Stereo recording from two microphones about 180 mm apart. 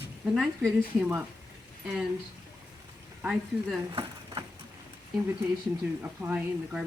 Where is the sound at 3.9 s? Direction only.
25° right (ahead or behind).